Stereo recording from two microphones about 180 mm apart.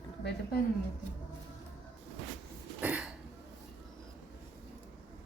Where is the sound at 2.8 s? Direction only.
10° right (ahead or behind).